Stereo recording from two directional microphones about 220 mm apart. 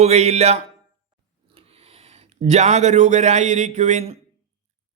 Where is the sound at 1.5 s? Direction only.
25° right (ahead or behind).